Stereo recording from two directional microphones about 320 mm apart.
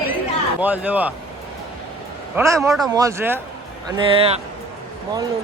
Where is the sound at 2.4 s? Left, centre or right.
Centre.